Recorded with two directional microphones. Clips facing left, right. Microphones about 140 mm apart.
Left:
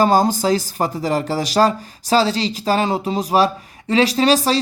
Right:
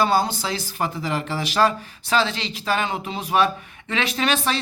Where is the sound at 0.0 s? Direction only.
40° left (ahead or behind).